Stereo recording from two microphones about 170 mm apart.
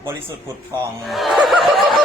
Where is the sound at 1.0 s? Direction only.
Centre (ahead or behind).